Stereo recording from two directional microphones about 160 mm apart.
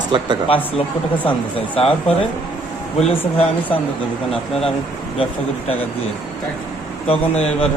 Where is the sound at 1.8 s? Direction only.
35° left (ahead or behind).